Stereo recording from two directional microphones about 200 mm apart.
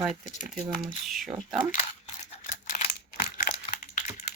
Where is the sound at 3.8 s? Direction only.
40° left (ahead or behind).